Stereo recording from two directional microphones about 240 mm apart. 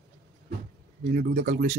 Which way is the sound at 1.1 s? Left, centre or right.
Right.